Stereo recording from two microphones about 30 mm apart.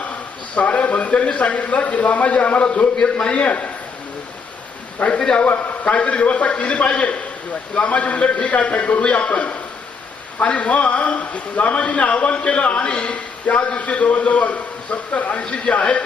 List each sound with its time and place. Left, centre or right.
0.5 s a man's voice: left
3.0 s a man's voice: left
4.9 s a man's voice: left
5.4 s a man's voice: left
5.8 s a man's voice: left
7.8 s a man's voice: left
8.7 s a man's voice: left
9.0 s a man's voice: left
10.4 s a man's voice: left
15.4 s a man's voice: left